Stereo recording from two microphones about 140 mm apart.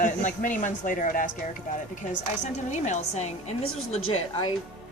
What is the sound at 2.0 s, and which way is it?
A woman's voice, 55° left (ahead or behind).